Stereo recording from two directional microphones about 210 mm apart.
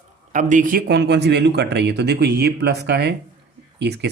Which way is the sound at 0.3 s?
35° right (ahead or behind).